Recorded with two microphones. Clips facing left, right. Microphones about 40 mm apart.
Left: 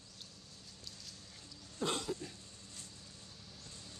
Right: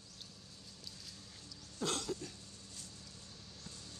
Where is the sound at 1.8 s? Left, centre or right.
Centre.